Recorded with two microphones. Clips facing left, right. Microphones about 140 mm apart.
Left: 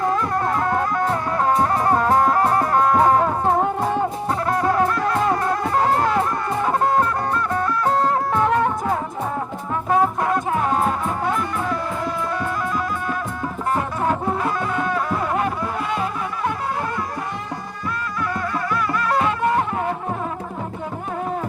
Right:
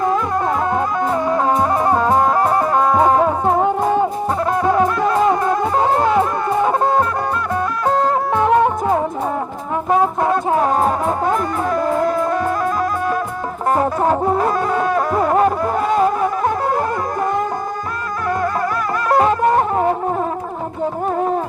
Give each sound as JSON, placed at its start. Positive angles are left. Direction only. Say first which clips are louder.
{"t": 0.7, "sound": "music", "louder": "right 3 dB", "side_deg": -15}
{"t": 8.4, "sound": "music", "louder": "right 7 dB", "side_deg": -20}
{"t": 13.7, "sound": "music", "louder": "right 6 dB", "side_deg": -40}
{"t": 19.0, "sound": "music", "louder": "right 7 dB", "side_deg": -40}